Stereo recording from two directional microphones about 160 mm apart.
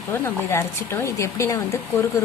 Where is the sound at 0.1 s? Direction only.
15° left (ahead or behind).